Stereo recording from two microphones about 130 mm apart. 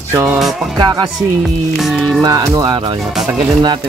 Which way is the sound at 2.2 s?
30° right (ahead or behind).